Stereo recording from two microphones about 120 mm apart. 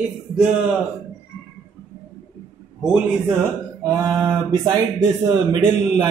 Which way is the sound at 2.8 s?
10° right (ahead or behind).